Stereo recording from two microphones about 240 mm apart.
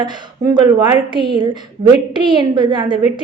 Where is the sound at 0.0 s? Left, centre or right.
Centre.